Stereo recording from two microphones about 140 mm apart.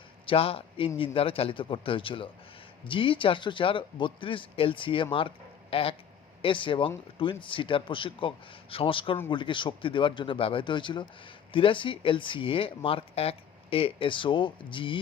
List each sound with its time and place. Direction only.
0.3 s speech: 45° left (ahead or behind)